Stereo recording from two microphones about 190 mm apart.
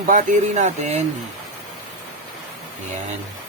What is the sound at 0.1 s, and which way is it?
Speech, 40° right (ahead or behind).